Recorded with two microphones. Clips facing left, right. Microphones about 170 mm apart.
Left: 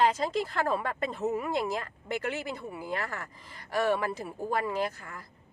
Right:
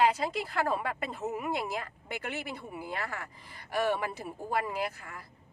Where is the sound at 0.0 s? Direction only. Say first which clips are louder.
Left 1 dB; 10° right (ahead or behind).